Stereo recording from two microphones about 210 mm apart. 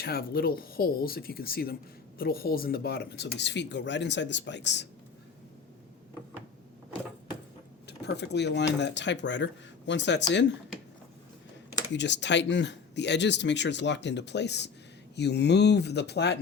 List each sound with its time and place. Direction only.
0.0 s a man's voice: 45° left (ahead or behind)
7.9 s a man's voice: 55° left (ahead or behind)
11.9 s a man's voice: 55° left (ahead or behind)